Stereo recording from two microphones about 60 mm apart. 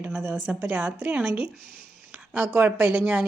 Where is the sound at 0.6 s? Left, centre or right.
Right.